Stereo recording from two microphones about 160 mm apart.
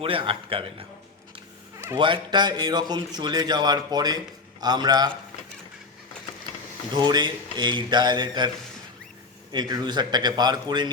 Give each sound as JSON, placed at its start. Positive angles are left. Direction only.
{"t": 0.0, "sound": "a man's voice", "side_deg": -35}
{"t": 2.0, "sound": "speech", "side_deg": -30}
{"t": 6.9, "sound": "speech", "side_deg": -25}
{"t": 9.5, "sound": "speech", "side_deg": -25}